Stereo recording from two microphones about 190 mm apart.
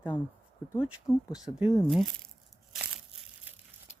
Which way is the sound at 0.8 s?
5° right (ahead or behind).